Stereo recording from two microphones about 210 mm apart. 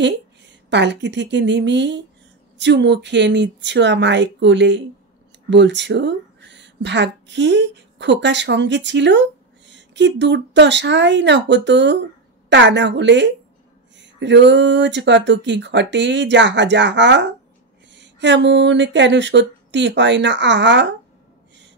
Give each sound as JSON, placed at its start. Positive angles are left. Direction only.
{"t": 0.7, "sound": "a woman's voice", "side_deg": -55}